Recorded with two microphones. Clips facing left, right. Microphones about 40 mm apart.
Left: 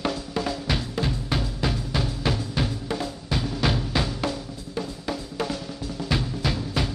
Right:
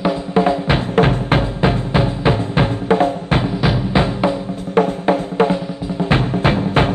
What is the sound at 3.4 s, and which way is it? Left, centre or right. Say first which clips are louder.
Music: right 7 dB; right.